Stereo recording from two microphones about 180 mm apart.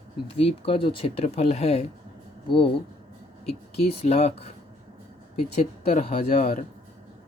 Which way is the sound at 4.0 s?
35° left (ahead or behind).